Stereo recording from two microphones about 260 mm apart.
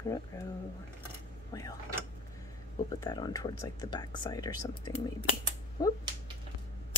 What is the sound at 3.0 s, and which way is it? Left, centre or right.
Speech, centre.